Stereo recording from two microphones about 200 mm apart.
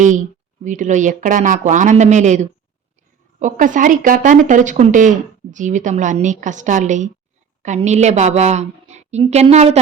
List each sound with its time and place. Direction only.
0.0 s speech: 40° right (ahead or behind)